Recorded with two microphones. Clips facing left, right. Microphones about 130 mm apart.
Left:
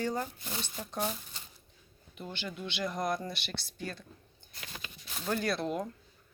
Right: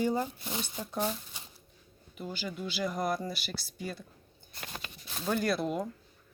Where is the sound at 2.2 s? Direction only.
5° right (ahead or behind).